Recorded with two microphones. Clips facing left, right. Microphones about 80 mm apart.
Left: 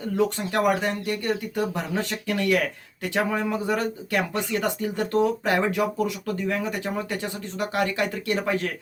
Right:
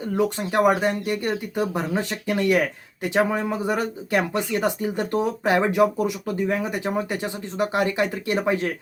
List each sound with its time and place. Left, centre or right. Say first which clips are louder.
0.2 s speech: right 3 dB; centre